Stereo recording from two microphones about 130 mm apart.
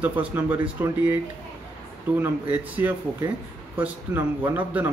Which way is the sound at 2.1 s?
15° right (ahead or behind).